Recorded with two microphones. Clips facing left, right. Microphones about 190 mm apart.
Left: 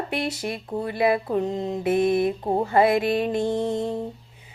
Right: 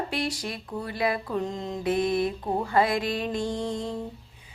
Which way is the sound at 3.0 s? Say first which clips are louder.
Left 6 dB; 55° left (ahead or behind).